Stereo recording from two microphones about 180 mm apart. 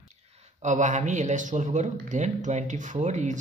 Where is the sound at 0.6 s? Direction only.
40° right (ahead or behind).